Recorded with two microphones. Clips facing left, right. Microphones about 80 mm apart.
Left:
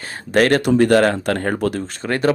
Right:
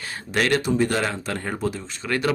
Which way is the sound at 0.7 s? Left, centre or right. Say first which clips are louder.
Left 9 dB; left.